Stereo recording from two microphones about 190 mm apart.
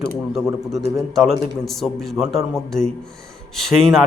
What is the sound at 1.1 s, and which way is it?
A man's voice, centre (ahead or behind).